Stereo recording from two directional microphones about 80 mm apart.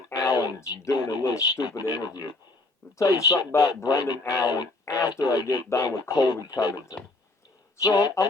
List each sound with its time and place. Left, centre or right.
0.1 s a sound: left
0.9 s speech: left
3.0 s speech: left
3.8 s speech: left
4.3 s speech: left
5.6 s speech: left
6.1 s speech: left